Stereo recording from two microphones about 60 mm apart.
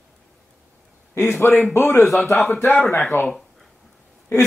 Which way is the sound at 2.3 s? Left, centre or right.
Centre.